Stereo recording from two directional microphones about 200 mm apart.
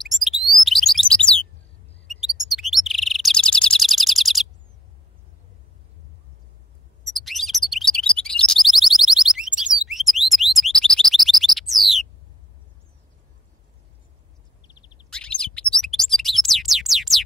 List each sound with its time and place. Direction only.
0.0 s chirp: centre (ahead or behind)
7.1 s chirp: centre (ahead or behind)
9.8 s bird: centre (ahead or behind)
14.6 s a sound: 20° left (ahead or behind)
15.0 s bird: 5° left (ahead or behind)
15.7 s a sound: centre (ahead or behind)